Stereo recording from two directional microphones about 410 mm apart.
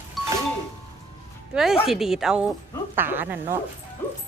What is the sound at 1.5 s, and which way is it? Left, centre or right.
Speech, centre.